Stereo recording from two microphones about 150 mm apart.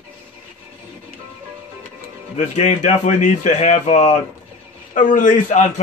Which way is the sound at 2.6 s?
50° left (ahead or behind).